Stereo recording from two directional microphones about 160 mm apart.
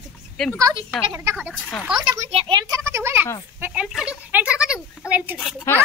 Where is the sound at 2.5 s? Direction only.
20° right (ahead or behind).